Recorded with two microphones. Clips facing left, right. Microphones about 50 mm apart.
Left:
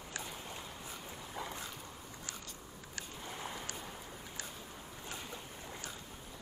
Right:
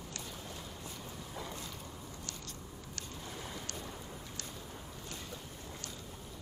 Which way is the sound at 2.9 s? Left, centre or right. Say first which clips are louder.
Left 2 dB; centre.